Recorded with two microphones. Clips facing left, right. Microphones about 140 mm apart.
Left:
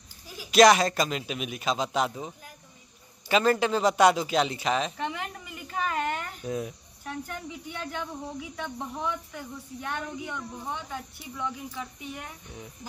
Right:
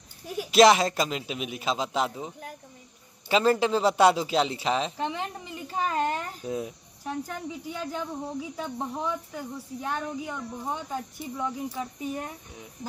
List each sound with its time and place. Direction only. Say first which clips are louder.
0.5 s a woman's voice: even; 25° right (ahead or behind)